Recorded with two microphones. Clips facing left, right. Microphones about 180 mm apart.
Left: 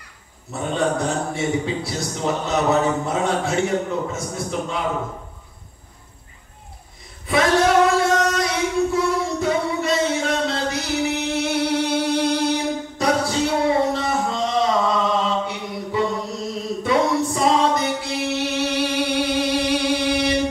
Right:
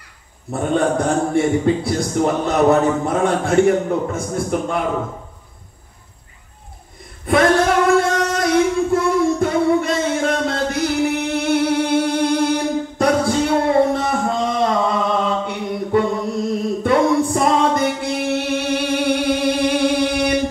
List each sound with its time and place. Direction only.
0.5 s a man's voice: 55° right (ahead or behind)
7.2 s singing: 55° right (ahead or behind)
15.1 s chant: 55° right (ahead or behind)
16.8 s music: 55° right (ahead or behind)